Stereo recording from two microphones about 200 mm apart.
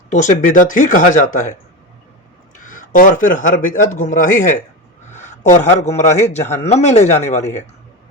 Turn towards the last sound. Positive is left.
turn(degrees=35)  # may be behind; listen again after turning